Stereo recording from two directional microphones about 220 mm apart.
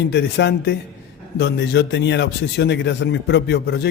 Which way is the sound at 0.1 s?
50° left (ahead or behind).